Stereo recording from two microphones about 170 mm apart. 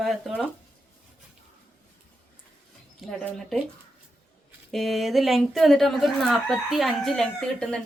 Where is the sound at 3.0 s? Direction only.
5° left (ahead or behind).